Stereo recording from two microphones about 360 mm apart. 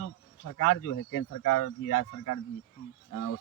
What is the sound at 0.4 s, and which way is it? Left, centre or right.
Speech, left.